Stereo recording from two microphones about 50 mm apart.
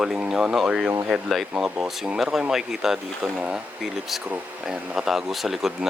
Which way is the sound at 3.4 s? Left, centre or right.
Centre.